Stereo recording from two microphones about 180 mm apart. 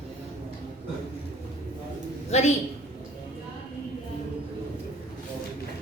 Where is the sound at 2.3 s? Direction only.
35° left (ahead or behind).